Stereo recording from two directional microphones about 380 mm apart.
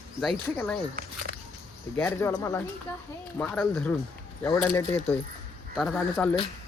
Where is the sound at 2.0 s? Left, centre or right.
Centre.